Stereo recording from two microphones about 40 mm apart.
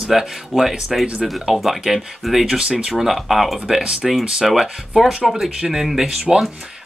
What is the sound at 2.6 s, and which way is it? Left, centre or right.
Speech, right.